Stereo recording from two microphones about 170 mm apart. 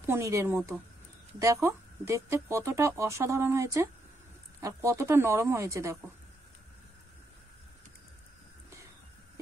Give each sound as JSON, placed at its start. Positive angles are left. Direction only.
{"t": 0.0, "sound": "speech", "side_deg": -15}